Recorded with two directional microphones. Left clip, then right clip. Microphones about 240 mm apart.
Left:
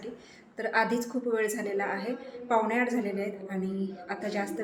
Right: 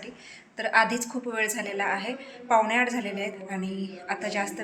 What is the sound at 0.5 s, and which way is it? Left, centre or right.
A woman's voice, centre.